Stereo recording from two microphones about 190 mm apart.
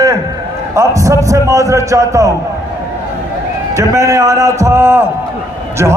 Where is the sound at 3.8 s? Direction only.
15° right (ahead or behind).